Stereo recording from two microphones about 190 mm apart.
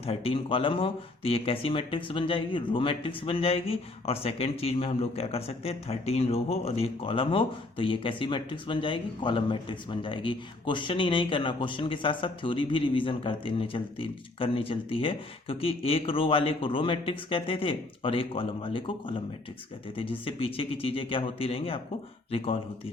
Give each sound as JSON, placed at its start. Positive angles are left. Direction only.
{"t": 0.1, "sound": "speech", "side_deg": 30}